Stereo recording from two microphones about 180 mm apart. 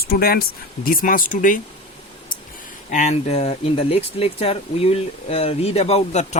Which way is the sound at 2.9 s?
40° left (ahead or behind).